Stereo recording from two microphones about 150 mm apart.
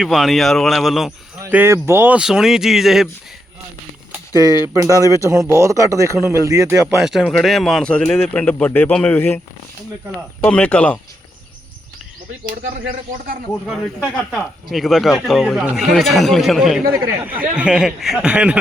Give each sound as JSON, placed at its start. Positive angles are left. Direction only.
{"t": 0.0, "sound": "speech", "side_deg": 0}
{"t": 1.4, "sound": "speech", "side_deg": -15}
{"t": 4.1, "sound": "a sound", "side_deg": -20}
{"t": 4.9, "sound": "speech", "side_deg": 20}
{"t": 5.3, "sound": "speech", "side_deg": -20}
{"t": 6.9, "sound": "speech", "side_deg": 0}
{"t": 10.4, "sound": "speech", "side_deg": 10}
{"t": 13.7, "sound": "speech", "side_deg": 5}